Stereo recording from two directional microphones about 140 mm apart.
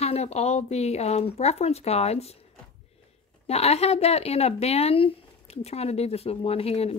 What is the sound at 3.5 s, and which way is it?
Speech, 50° left (ahead or behind).